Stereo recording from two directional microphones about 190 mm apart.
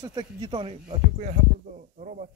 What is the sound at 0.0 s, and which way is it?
Speech, 20° right (ahead or behind).